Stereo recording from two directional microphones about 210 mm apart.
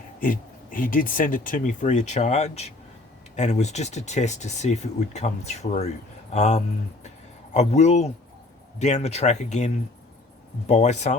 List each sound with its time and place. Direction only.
0.2 s speech: 40° left (ahead or behind)